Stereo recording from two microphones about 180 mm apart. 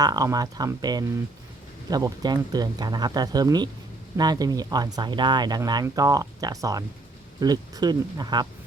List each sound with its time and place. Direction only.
0.0 s speech: 20° right (ahead or behind)